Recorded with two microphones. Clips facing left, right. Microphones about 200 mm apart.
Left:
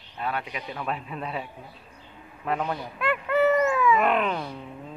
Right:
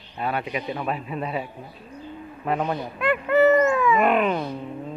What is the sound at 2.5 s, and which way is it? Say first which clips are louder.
Speech: right 4 dB; 15° right (ahead or behind).